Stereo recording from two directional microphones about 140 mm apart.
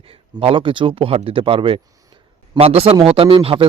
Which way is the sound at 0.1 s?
40° right (ahead or behind).